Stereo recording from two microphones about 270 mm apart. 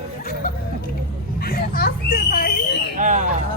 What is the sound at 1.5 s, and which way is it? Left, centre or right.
Speech, left.